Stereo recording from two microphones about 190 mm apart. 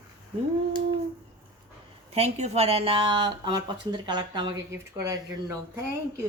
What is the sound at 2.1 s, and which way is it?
Speech, 35° right (ahead or behind).